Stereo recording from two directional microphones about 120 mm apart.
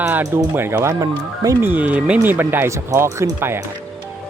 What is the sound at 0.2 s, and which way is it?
Speech, 20° right (ahead or behind).